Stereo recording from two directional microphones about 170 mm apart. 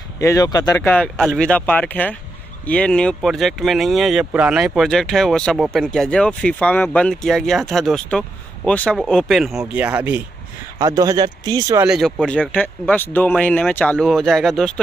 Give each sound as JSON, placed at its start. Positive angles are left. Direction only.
{"t": 0.2, "sound": "speech", "side_deg": 20}
{"t": 10.8, "sound": "speech", "side_deg": -20}
{"t": 11.9, "sound": "speech", "side_deg": 0}